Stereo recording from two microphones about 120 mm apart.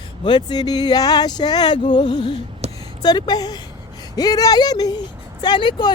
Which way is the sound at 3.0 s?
35° left (ahead or behind).